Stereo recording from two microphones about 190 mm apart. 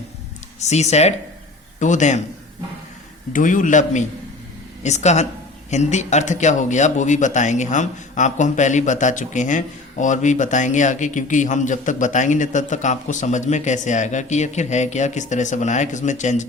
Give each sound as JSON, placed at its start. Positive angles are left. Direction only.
{"t": 0.6, "sound": "speech", "side_deg": 35}
{"t": 3.3, "sound": "speech", "side_deg": 45}